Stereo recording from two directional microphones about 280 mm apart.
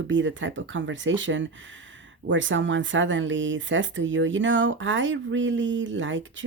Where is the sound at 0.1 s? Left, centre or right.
Right.